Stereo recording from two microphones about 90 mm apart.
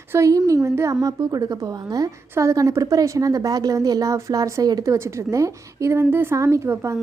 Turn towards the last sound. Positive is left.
turn(degrees=-30)  # may be behind; listen again after turning